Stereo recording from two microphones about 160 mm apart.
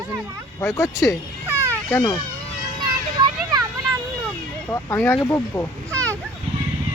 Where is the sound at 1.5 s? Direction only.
15° right (ahead or behind).